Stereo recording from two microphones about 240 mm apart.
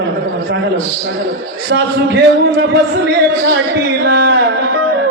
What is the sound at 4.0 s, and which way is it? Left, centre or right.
Speech, right.